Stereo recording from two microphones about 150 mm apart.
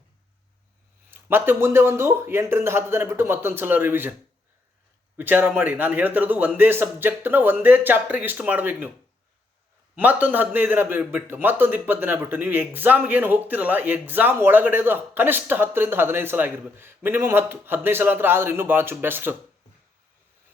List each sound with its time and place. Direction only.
1.1 s a man's voice: 15° right (ahead or behind)
5.1 s a man's voice: 15° right (ahead or behind)
9.9 s a man's voice: 10° right (ahead or behind)